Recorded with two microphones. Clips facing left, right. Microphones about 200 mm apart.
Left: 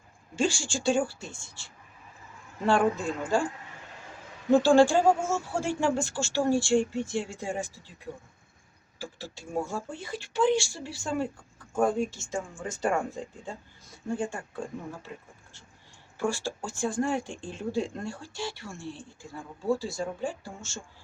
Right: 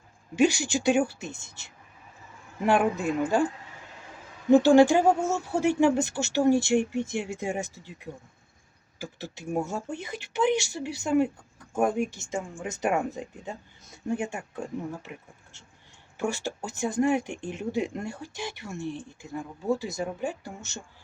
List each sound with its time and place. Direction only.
0.3 s speech: 20° right (ahead or behind)
4.5 s speech: 20° right (ahead or behind)
9.0 s speech: 20° right (ahead or behind)
12.1 s speech: 20° right (ahead or behind)
16.1 s speech: 20° right (ahead or behind)